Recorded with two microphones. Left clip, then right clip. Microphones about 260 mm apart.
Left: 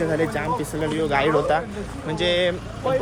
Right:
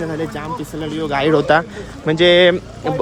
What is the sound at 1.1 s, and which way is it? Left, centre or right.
Speech, right.